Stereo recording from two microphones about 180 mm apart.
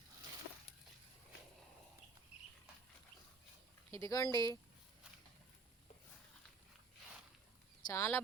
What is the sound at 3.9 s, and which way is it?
Speech, 20° left (ahead or behind).